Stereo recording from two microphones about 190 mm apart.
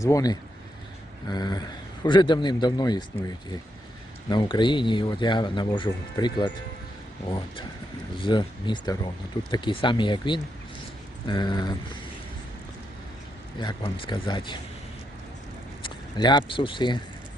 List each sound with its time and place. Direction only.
0.0 s speech: 20° left (ahead or behind)
13.6 s speech: 25° left (ahead or behind)
15.8 s speech: 25° left (ahead or behind)